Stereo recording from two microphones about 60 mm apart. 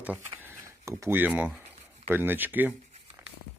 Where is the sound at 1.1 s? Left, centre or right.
Right.